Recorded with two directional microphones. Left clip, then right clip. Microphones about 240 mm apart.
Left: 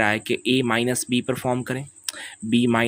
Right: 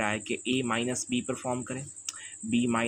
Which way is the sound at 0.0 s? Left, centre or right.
Left.